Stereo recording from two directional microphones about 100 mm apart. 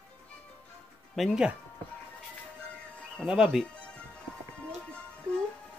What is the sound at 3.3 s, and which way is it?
Speech, 5° right (ahead or behind).